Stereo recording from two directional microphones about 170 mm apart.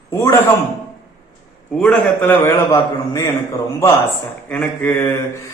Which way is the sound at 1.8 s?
10° left (ahead or behind).